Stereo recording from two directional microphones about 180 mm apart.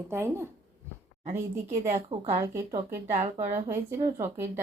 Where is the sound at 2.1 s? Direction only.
30° right (ahead or behind).